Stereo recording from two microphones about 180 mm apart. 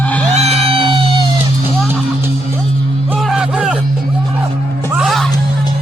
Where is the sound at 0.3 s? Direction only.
35° right (ahead or behind).